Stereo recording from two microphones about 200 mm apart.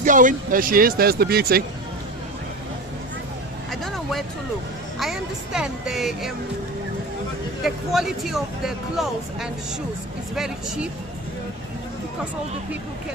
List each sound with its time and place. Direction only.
0.0 s speech: 40° right (ahead or behind)
3.7 s vehicle: centre (ahead or behind)
4.9 s speech: centre (ahead or behind)
7.6 s speech: centre (ahead or behind)